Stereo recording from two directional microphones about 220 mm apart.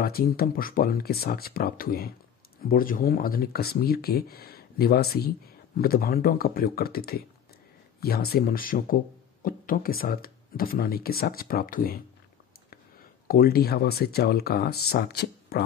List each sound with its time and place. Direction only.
0.0 s speech: 45° left (ahead or behind)
13.3 s speech: 45° left (ahead or behind)